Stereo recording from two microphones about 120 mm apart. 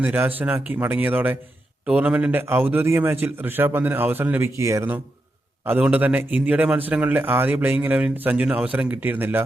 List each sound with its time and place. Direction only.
0.0 s a man's voice: 15° right (ahead or behind)